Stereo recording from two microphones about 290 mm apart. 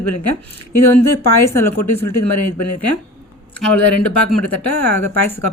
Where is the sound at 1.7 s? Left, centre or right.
Left.